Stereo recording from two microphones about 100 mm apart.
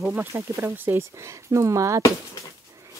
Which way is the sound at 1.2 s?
30° right (ahead or behind).